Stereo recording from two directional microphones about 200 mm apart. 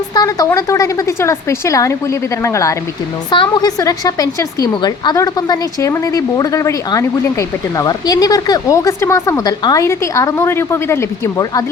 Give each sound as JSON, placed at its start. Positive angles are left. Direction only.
{"t": 0.1, "sound": "a woman's voice", "side_deg": 20}